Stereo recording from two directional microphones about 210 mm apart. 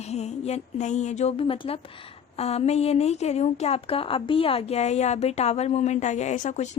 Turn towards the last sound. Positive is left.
turn(degrees=35)  # may be behind; listen again after turning